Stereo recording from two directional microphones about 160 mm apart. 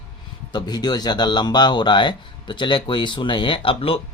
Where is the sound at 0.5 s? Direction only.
25° left (ahead or behind).